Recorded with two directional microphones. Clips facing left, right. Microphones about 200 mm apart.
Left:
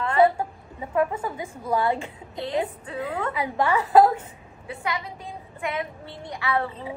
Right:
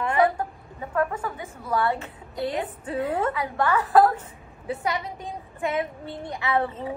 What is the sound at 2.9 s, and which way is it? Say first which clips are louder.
Speech: right 4 dB; 25° right (ahead or behind).